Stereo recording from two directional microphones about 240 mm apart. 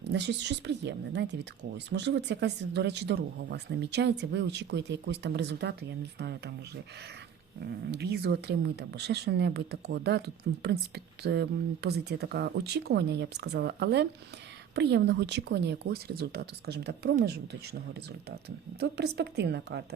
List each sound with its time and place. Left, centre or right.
0.0 s speech: right
7.6 s speech: right